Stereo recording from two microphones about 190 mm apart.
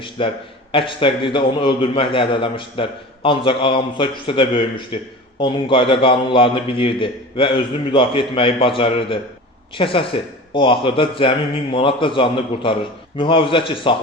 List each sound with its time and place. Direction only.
0.2 s a man's voice: 25° left (ahead or behind)